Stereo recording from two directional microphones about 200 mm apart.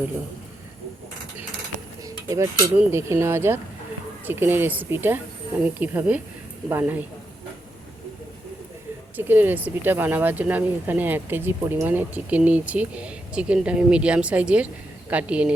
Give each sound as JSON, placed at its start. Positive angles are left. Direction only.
{"t": 2.0, "sound": "cutlery", "side_deg": -15}
{"t": 2.7, "sound": "speech", "side_deg": -15}
{"t": 9.1, "sound": "speech", "side_deg": -10}